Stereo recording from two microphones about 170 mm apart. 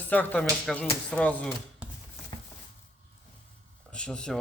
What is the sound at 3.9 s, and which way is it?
Speech, 5° left (ahead or behind).